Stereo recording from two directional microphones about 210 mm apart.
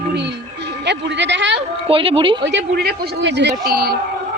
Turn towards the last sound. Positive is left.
turn(degrees=-50)  # may be behind; listen again after turning